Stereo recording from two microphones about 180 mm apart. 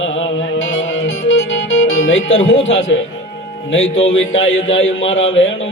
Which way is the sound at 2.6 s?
90° left.